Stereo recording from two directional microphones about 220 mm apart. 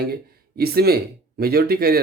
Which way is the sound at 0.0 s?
45° right (ahead or behind).